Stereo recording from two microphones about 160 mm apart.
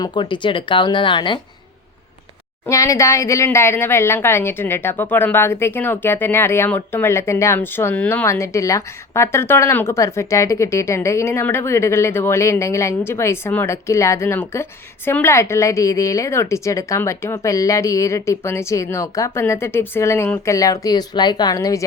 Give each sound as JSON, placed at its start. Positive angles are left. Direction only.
{"t": 0.0, "sound": "speech", "side_deg": 30}
{"t": 2.6, "sound": "speech", "side_deg": 20}